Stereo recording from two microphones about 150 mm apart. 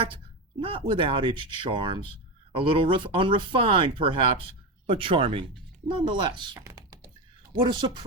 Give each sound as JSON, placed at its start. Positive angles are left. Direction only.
{"t": 0.6, "sound": "speech", "side_deg": -35}
{"t": 6.6, "sound": "computer keyboard", "side_deg": -20}
{"t": 7.6, "sound": "speech", "side_deg": -35}